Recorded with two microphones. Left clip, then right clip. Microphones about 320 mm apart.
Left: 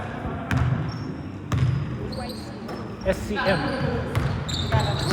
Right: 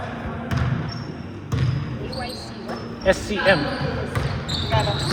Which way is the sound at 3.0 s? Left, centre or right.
Right.